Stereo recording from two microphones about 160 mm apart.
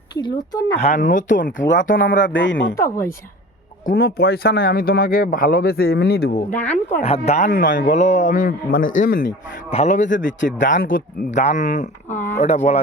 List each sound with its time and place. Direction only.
0.2 s speech: 25° left (ahead or behind)
0.8 s a man's voice: 50° left (ahead or behind)
2.7 s speech: 20° left (ahead or behind)
3.8 s speech: 70° left (ahead or behind)
7.0 s a man's voice: 40° left (ahead or behind); by 9.3 s 60° left (ahead or behind)
9.6 s speech: 45° left (ahead or behind)
12.1 s a sound: 15° left (ahead or behind)
12.4 s speech: 45° left (ahead or behind)